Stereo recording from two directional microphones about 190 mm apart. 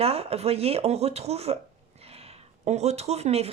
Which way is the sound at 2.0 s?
30° right (ahead or behind).